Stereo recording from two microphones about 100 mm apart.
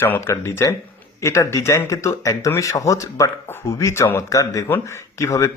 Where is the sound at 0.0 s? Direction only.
25° left (ahead or behind).